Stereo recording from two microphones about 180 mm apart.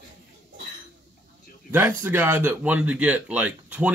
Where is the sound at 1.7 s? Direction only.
10° right (ahead or behind).